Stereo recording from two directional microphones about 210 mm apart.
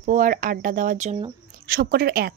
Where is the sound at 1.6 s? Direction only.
45° right (ahead or behind).